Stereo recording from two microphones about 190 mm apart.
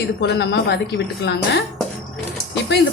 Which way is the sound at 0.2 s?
65° left (ahead or behind).